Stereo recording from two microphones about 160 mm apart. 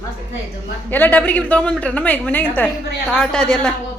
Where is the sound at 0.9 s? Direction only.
10° left (ahead or behind).